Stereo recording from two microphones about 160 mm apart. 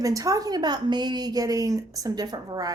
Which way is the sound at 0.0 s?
20° right (ahead or behind).